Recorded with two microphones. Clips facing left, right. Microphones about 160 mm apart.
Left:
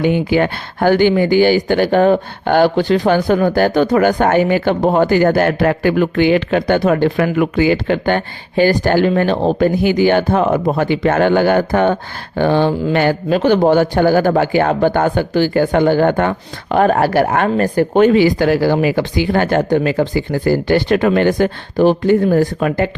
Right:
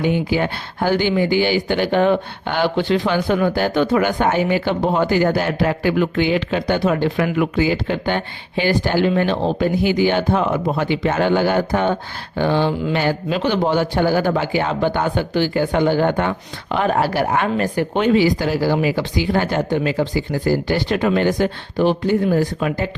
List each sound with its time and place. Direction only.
0.0 s speech: 65° left (ahead or behind)
7.3 s speech: 65° left (ahead or behind); by 18.1 s 45° left (ahead or behind)
18.1 s speech: 60° left (ahead or behind)